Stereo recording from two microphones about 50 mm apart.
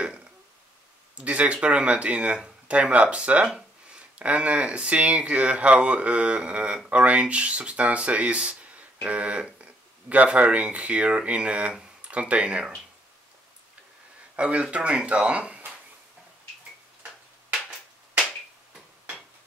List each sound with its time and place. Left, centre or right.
1.1 s speech: right
14.3 s speech: right